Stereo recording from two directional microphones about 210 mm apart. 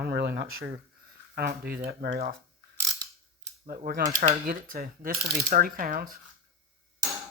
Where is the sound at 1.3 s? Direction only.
50° right (ahead or behind).